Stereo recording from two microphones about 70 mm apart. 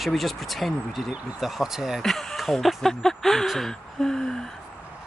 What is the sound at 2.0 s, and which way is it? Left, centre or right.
Speech, centre.